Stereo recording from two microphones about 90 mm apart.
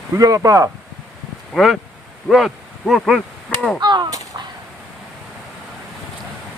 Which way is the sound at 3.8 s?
55° right (ahead or behind).